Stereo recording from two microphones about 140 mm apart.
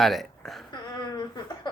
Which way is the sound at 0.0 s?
Centre (ahead or behind).